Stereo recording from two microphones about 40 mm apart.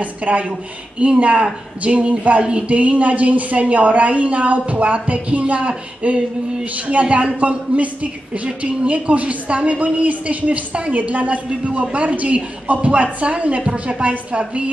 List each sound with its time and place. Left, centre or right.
0.0 s a woman's voice: right
2.4 s speech: right
2.8 s a woman's voice: right